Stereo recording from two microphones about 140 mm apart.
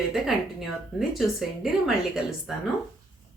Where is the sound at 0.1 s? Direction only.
Centre (ahead or behind).